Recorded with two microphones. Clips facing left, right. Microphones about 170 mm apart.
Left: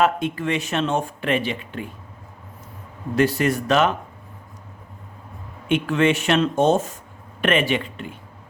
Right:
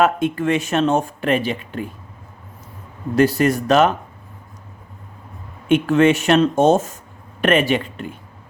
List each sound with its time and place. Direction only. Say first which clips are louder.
0.0 s speech: right 3 dB; 50° right (ahead or behind)
3.2 s speech: right 4 dB; 40° right (ahead or behind)
5.6 s speech: right 5 dB; 45° right (ahead or behind)